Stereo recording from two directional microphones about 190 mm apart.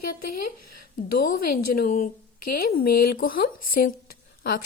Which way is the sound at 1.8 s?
50° left (ahead or behind).